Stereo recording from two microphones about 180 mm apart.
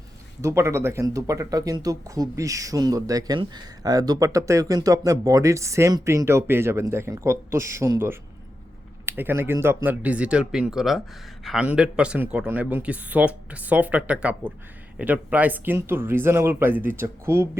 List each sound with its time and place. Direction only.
0.4 s speech: 15° right (ahead or behind)